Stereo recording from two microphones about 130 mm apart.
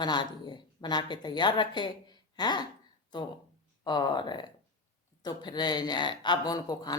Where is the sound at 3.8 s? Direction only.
35° left (ahead or behind).